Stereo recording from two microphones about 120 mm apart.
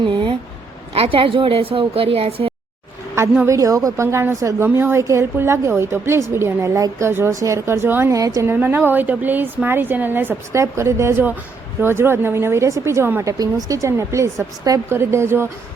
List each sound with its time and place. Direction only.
0.1 s a sound: 45° right (ahead or behind)
0.9 s a woman's voice: 55° right (ahead or behind)
3.4 s a woman's voice: 25° right (ahead or behind)